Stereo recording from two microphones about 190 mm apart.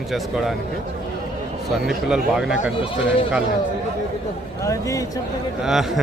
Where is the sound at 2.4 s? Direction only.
Centre (ahead or behind).